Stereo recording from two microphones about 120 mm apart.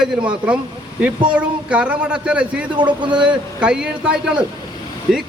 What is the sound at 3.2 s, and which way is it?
Speech, 10° right (ahead or behind).